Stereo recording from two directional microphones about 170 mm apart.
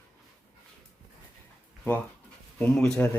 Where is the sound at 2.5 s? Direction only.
5° left (ahead or behind).